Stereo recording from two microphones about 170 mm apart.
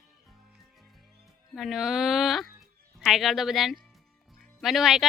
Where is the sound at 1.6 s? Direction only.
Centre (ahead or behind).